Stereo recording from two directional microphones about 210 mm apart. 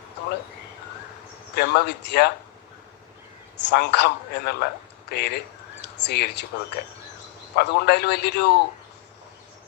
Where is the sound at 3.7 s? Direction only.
55° left (ahead or behind).